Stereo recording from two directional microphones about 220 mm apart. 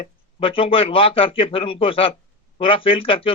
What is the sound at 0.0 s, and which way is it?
Speech, 25° left (ahead or behind).